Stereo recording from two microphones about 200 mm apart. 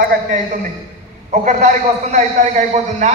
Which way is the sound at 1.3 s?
35° right (ahead or behind).